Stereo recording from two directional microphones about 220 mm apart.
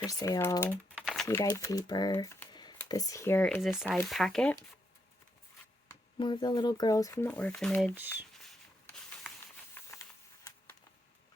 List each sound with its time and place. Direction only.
0.0 s speech: 15° left (ahead or behind)
1.4 s speech: 15° left (ahead or behind)
6.1 s speech: 20° left (ahead or behind); by 7.9 s 5° left (ahead or behind)
9.8 s a sound: 10° left (ahead or behind)